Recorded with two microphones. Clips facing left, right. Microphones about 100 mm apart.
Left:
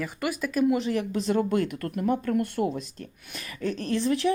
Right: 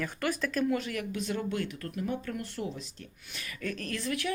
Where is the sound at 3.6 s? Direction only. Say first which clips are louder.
Left 8 dB; 25° left (ahead or behind).